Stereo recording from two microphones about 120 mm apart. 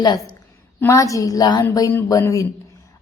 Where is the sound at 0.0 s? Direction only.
35° left (ahead or behind).